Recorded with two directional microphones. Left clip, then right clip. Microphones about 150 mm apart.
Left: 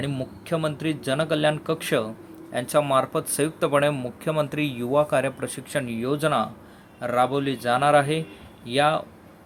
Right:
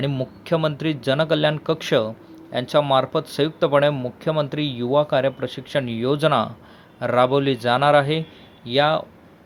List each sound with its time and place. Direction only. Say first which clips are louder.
0.0 s speech: right 5 dB; 30° right (ahead or behind)